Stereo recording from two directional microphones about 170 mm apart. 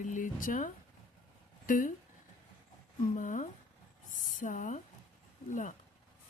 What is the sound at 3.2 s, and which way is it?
A woman's voice, 50° left (ahead or behind).